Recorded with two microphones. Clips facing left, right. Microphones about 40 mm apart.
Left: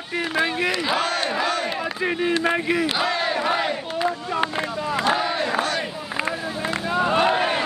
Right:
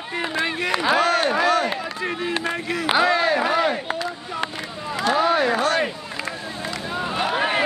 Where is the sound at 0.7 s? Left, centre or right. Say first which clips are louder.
Right 4 dB; centre.